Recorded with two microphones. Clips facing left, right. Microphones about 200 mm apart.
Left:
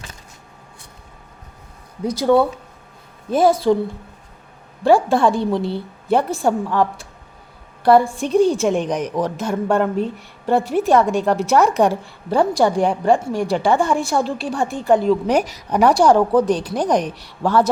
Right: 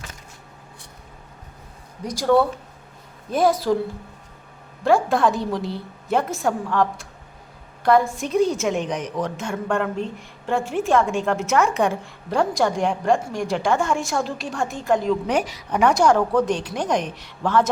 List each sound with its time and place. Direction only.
3.4 s a woman's voice: centre (ahead or behind)
4.8 s a woman's voice: 30° left (ahead or behind)